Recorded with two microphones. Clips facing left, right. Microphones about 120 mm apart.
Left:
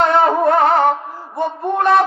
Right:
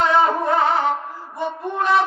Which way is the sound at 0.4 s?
55° left (ahead or behind).